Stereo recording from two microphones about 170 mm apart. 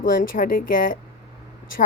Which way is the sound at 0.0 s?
55° left (ahead or behind).